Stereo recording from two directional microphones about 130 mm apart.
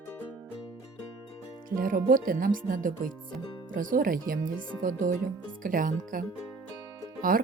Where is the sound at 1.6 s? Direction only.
90° right.